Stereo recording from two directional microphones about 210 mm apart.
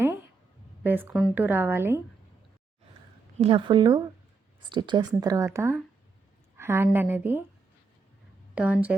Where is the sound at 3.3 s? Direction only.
25° right (ahead or behind); by 7.4 s 10° right (ahead or behind).